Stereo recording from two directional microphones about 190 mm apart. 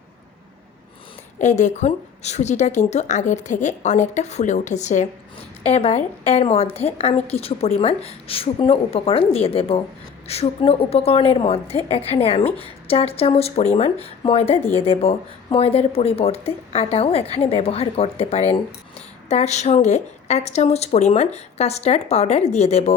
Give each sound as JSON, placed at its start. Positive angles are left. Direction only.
{"t": 1.4, "sound": "a woman's voice", "side_deg": 40}